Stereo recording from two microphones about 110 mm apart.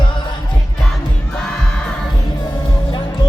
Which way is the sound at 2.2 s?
45° left (ahead or behind).